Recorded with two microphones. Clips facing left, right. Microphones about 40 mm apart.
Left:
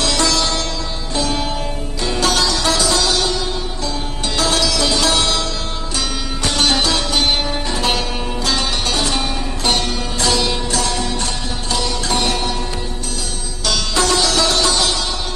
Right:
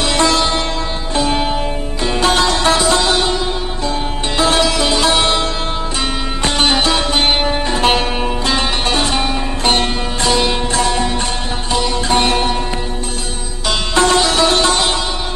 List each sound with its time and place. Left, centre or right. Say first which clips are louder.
0.0 s sitar: right 3 dB; right
2.0 s music: right 3 dB; right
6.4 s sitar: right 2 dB; right
8.5 s music: right 2 dB; right
11.7 s sitar: right 5 dB; right
13.7 s sitar: right 4 dB; right